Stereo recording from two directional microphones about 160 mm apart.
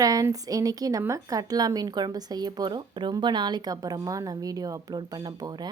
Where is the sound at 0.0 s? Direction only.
20° right (ahead or behind).